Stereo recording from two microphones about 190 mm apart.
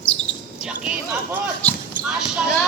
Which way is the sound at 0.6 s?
5° right (ahead or behind).